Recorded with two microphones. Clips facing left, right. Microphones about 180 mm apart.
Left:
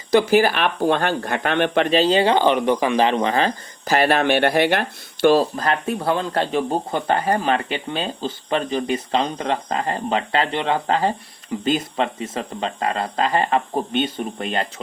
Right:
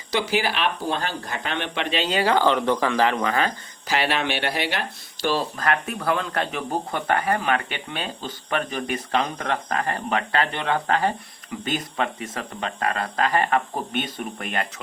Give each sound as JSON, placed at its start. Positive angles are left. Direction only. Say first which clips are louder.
{"t": 0.1, "sound": "speech", "louder": "left 8 dB", "side_deg": 45}
{"t": 3.8, "sound": "speech", "louder": "left 6 dB", "side_deg": 45}
{"t": 5.4, "sound": "speech", "louder": "left 4 dB", "side_deg": 30}